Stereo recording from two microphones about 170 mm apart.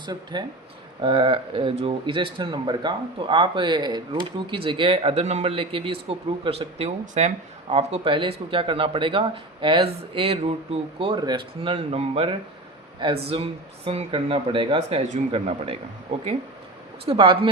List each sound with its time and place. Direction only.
0.0 s speech: 25° right (ahead or behind); by 7.3 s 45° right (ahead or behind)
7.7 s speech: 35° right (ahead or behind)
17.1 s speech: 30° right (ahead or behind)